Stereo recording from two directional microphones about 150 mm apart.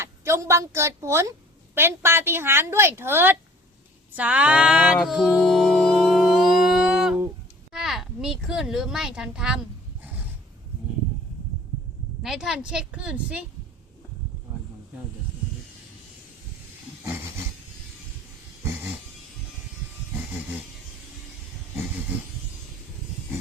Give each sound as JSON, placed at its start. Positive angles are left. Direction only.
{"t": 0.0, "sound": "a woman's voice", "side_deg": -15}
{"t": 4.9, "sound": "a sound", "side_deg": 0}
{"t": 7.7, "sound": "speech", "side_deg": 0}
{"t": 12.2, "sound": "a woman's voice", "side_deg": -5}
{"t": 17.0, "sound": "dog", "side_deg": -15}